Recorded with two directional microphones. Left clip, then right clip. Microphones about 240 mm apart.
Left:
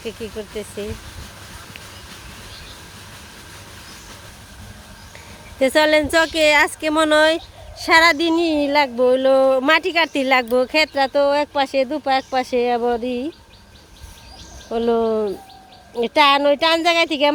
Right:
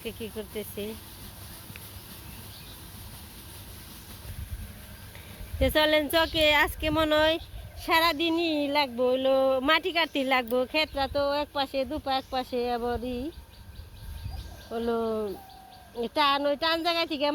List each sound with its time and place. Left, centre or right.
0.0 s speech: centre
5.5 s speech: centre
14.7 s speech: left